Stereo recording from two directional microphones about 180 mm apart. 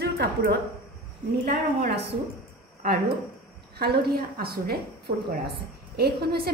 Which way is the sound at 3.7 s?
60° right (ahead or behind).